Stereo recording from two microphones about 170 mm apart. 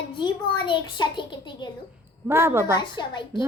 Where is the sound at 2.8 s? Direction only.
25° left (ahead or behind).